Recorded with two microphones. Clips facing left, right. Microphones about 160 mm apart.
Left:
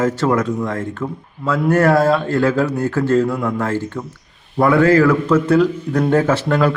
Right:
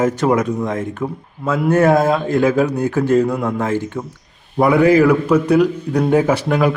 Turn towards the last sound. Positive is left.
turn(degrees=-15)  # may be behind; listen again after turning